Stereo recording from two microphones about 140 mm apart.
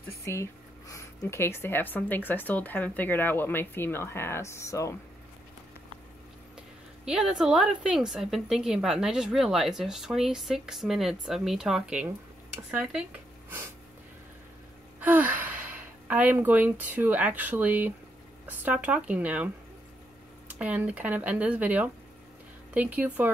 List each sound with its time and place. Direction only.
0.2 s speech: 20° left (ahead or behind)
7.1 s a woman's voice: 5° right (ahead or behind)
15.0 s speech: 10° right (ahead or behind)